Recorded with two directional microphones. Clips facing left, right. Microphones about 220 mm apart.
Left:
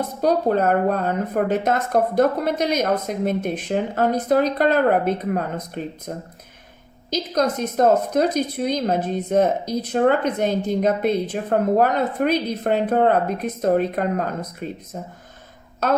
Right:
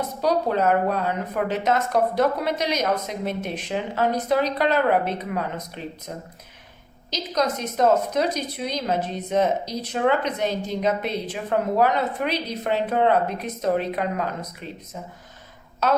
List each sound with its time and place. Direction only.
0.2 s a woman's voice: 50° left (ahead or behind)
7.1 s a woman's voice: 50° left (ahead or behind)